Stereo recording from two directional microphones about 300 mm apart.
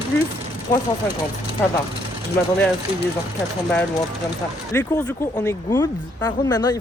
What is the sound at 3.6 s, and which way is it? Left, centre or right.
Speech, centre.